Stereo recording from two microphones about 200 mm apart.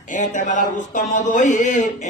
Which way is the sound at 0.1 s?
40° left (ahead or behind).